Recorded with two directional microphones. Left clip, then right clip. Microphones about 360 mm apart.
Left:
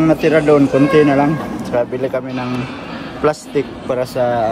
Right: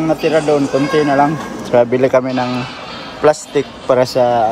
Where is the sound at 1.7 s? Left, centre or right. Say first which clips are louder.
Right 6 dB; right.